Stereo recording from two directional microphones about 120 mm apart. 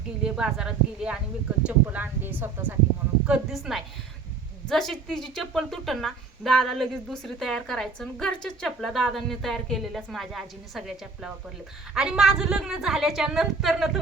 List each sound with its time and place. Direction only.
0.2 s a woman's voice: 5° right (ahead or behind)